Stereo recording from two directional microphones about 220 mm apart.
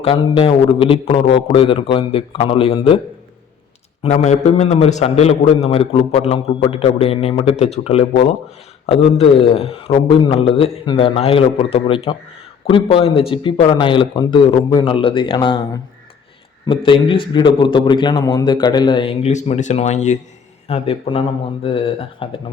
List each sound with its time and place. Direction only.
0.0 s a man's voice: 25° left (ahead or behind)
4.0 s a man's voice: 30° left (ahead or behind)